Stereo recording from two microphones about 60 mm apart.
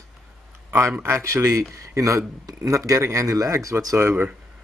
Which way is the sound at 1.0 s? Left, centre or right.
Right.